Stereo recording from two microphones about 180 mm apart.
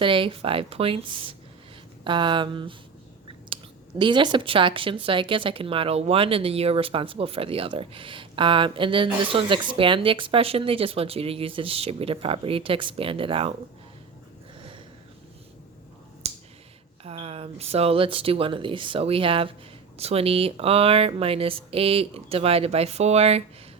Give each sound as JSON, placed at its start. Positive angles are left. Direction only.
{"t": 0.0, "sound": "speech", "side_deg": -30}
{"t": 16.2, "sound": "a sound", "side_deg": -35}
{"t": 17.0, "sound": "speech", "side_deg": -35}